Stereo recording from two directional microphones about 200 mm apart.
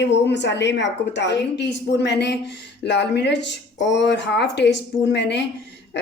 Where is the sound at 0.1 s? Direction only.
60° left (ahead or behind).